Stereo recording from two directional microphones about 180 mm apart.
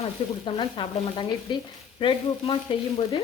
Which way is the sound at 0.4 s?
30° left (ahead or behind).